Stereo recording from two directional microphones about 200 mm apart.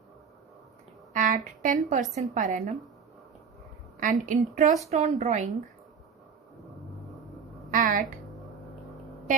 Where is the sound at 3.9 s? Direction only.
40° right (ahead or behind).